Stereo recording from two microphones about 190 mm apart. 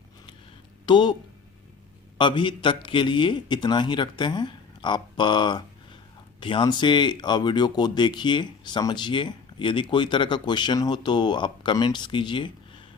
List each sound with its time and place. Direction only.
0.9 s speech: 25° left (ahead or behind)
2.1 s a man's voice: 25° left (ahead or behind)